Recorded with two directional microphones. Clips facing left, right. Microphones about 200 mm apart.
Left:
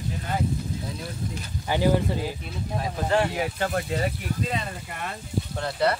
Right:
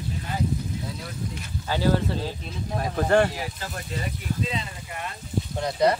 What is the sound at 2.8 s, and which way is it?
Speech, 55° right (ahead or behind).